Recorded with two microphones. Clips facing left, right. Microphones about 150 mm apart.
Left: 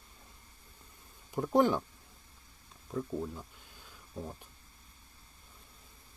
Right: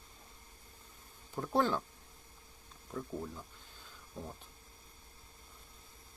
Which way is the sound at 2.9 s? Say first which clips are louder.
Left 5 dB; 10° left (ahead or behind).